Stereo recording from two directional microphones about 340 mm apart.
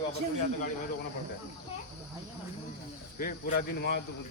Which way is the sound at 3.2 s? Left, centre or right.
Left.